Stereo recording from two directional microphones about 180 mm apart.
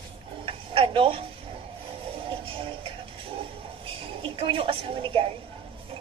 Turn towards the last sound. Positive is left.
turn(degrees=-30)  # may be behind; listen again after turning